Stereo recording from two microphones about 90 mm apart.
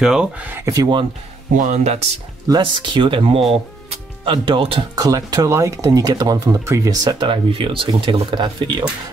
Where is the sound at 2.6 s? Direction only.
65° right (ahead or behind); by 3.5 s 90° right.